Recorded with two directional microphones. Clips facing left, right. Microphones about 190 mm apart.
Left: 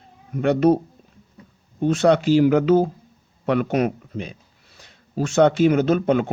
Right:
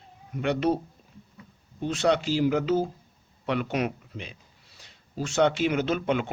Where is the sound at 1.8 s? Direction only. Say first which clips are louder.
Left 7 dB; 50° left (ahead or behind).